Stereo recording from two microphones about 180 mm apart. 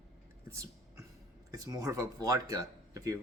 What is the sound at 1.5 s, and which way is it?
Speech, 20° right (ahead or behind).